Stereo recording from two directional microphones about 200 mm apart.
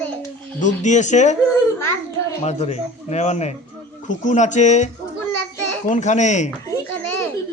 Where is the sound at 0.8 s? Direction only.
35° left (ahead or behind).